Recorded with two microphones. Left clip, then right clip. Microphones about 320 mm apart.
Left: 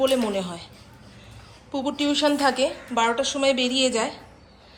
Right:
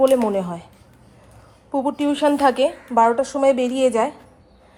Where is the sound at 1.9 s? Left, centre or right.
Centre.